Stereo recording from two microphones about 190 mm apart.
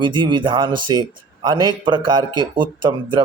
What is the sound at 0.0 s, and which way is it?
Speech, 25° right (ahead or behind).